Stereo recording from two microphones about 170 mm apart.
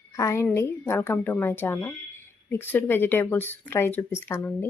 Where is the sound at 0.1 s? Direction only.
15° left (ahead or behind).